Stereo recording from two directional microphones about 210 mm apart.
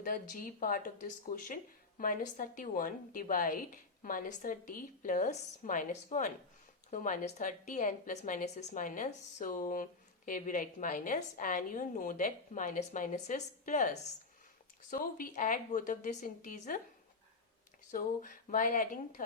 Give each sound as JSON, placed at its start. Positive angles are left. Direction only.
{"t": 0.0, "sound": "a woman's voice", "side_deg": 40}
{"t": 17.9, "sound": "a woman's voice", "side_deg": 40}